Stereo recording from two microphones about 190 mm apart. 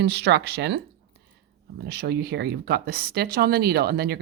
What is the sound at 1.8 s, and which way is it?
Speech, 55° right (ahead or behind).